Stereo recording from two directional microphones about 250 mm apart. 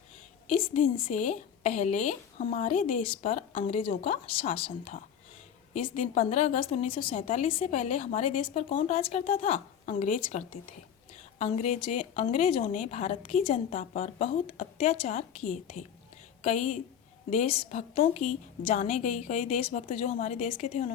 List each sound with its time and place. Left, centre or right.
0.4 s a woman's voice: left